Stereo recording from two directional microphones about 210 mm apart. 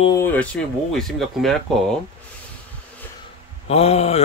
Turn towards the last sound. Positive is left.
turn(degrees=30)  # may be behind; listen again after turning